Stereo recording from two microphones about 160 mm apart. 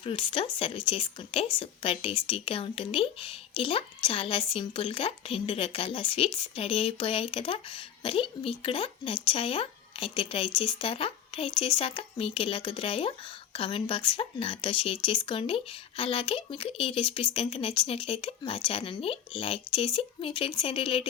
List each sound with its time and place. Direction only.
0.0 s a woman's voice: 35° left (ahead or behind)